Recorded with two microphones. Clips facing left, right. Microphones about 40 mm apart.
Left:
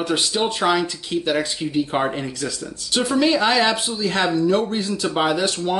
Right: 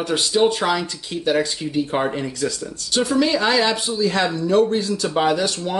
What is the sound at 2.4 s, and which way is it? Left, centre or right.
Speech, left.